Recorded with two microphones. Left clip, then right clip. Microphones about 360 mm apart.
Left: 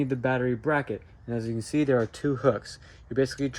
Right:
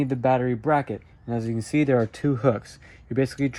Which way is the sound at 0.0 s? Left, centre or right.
Centre.